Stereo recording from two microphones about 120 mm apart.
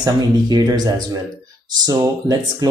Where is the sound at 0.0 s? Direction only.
35° right (ahead or behind).